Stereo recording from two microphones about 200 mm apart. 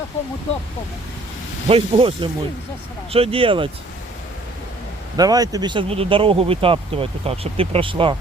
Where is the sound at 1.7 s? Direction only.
25° right (ahead or behind).